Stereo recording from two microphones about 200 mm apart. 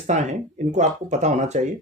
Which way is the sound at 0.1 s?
35° right (ahead or behind).